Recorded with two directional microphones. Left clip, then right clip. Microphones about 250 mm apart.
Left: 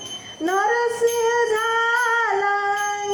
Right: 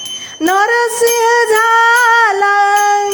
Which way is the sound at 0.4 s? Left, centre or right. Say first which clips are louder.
Right 8 dB; right.